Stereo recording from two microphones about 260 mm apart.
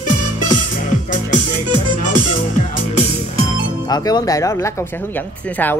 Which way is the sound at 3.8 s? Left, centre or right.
Centre.